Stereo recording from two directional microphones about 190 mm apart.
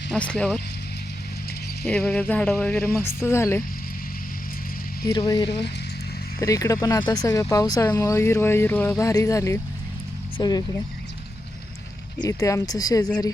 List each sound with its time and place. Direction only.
0.1 s speech: 5° left (ahead or behind)
1.9 s speech: 10° left (ahead or behind)
5.0 s speech: 20° left (ahead or behind)
5.5 s speech: 60° left (ahead or behind)
6.4 s speech: 15° left (ahead or behind)
12.2 s speech: 15° left (ahead or behind)